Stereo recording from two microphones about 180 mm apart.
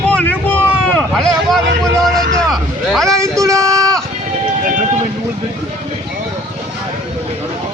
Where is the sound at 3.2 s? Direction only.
15° right (ahead or behind).